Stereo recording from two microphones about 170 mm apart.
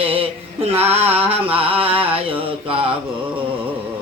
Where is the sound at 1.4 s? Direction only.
35° right (ahead or behind).